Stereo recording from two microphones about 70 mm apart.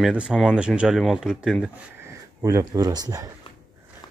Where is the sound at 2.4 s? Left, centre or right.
Right.